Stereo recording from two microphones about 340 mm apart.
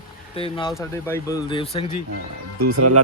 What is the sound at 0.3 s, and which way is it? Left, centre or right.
Speech, centre.